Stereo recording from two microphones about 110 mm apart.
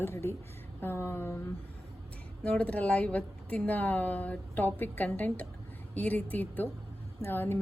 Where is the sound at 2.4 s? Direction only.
10° left (ahead or behind).